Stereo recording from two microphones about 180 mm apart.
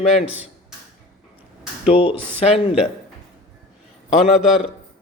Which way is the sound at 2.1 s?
10° right (ahead or behind).